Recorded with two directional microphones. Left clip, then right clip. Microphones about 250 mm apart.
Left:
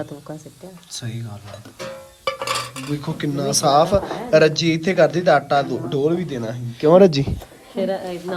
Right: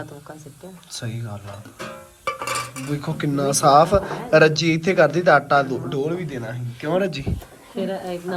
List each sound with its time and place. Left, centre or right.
0.9 s speech: centre
2.5 s speech: centre; by 7.3 s left
7.8 s speech: centre